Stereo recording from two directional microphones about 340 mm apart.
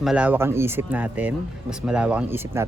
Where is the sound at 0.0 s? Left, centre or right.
Centre.